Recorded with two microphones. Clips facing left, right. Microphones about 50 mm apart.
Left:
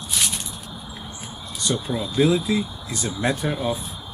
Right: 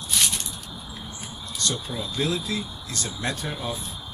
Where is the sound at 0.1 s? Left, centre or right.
Centre.